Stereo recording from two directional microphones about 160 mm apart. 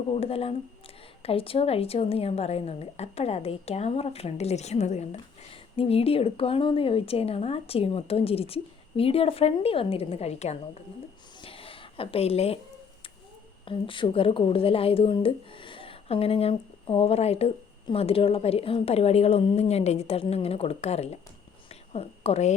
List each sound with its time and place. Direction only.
0.2 s speech: 35° left (ahead or behind)
11.3 s a sound: 35° left (ahead or behind)
13.7 s speech: 30° left (ahead or behind)
21.7 s whispering: 40° left (ahead or behind)